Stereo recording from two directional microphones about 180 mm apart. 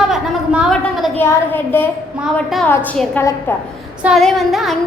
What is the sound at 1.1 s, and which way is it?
Speech, 10° left (ahead or behind).